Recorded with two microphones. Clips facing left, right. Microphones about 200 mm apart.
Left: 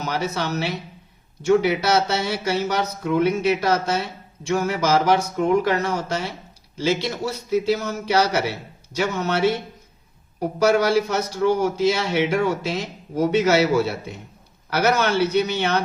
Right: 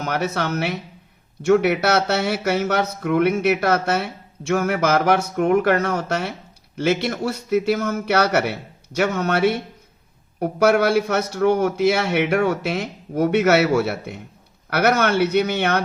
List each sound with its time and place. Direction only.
0.0 s a man's voice: 60° right (ahead or behind)